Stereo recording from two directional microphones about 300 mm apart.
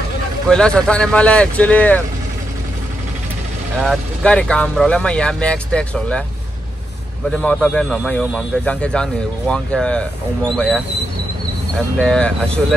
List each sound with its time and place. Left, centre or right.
0.5 s a man's voice: centre
3.8 s a man's voice: centre
7.2 s a man's voice: centre
12.0 s a man's voice: centre